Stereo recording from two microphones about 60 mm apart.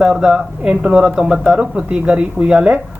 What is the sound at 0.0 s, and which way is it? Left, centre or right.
Speech, centre.